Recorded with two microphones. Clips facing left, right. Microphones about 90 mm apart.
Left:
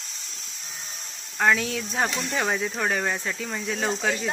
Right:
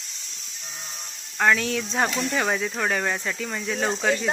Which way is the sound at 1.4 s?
5° left (ahead or behind).